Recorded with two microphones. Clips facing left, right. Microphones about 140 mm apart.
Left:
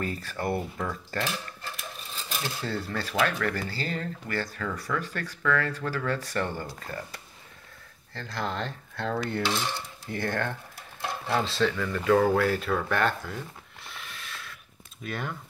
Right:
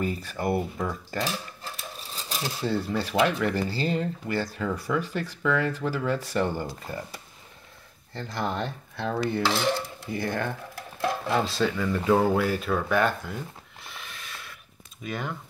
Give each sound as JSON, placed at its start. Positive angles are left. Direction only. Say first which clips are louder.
{"t": 0.0, "sound": "speech", "louder": "right 3 dB", "side_deg": -10}
{"t": 2.1, "sound": "a sound", "louder": "right 1 dB", "side_deg": -35}
{"t": 2.4, "sound": "speech", "louder": "right 5 dB", "side_deg": -10}
{"t": 8.1, "sound": "speech", "louder": "right 3 dB", "side_deg": -20}
{"t": 9.4, "sound": "cutlery", "louder": "right 4 dB", "side_deg": -90}
{"t": 10.1, "sound": "speech", "louder": "right 1 dB", "side_deg": -10}
{"t": 12.4, "sound": "speech", "louder": "right 1 dB", "side_deg": -5}
{"t": 13.8, "sound": "a sound", "louder": "even", "side_deg": 0}
{"t": 15.0, "sound": "speech", "louder": "right 2 dB", "side_deg": 0}